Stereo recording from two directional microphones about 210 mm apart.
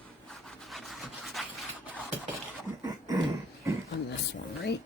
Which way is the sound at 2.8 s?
15° right (ahead or behind).